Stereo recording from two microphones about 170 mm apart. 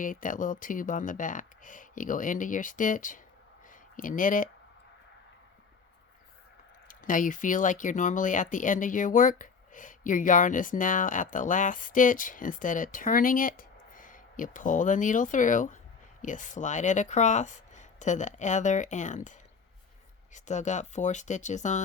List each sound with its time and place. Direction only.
0.0 s speech: 50° left (ahead or behind)
6.8 s speech: 50° left (ahead or behind)